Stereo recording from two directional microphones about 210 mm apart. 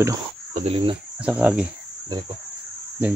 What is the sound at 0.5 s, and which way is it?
Cricket, 25° right (ahead or behind).